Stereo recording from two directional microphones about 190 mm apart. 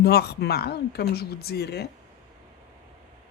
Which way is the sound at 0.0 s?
55° left (ahead or behind).